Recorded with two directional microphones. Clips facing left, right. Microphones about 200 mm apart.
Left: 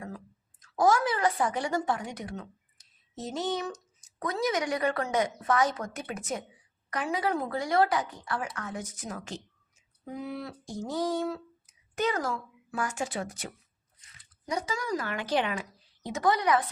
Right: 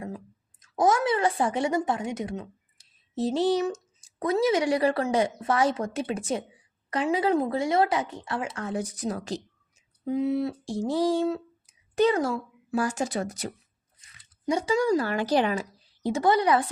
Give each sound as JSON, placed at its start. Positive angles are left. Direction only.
{"t": 0.6, "sound": "a woman's voice", "side_deg": -20}
{"t": 10.1, "sound": "speech", "side_deg": -25}
{"t": 14.5, "sound": "speech", "side_deg": -30}